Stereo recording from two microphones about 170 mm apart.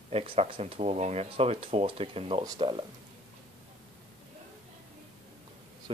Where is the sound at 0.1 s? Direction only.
35° right (ahead or behind).